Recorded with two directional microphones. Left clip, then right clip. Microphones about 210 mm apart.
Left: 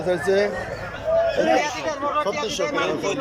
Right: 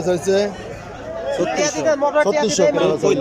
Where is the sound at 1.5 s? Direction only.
50° right (ahead or behind).